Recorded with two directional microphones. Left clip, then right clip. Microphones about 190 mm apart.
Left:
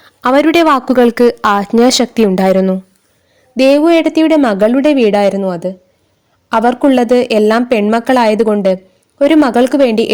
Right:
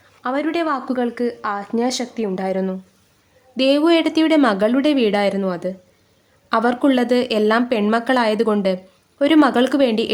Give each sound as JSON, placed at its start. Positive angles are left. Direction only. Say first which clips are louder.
{"t": 0.0, "sound": "speech", "louder": "left 12 dB", "side_deg": 55}